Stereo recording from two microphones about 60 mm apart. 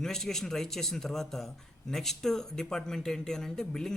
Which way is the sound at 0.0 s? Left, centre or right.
Centre.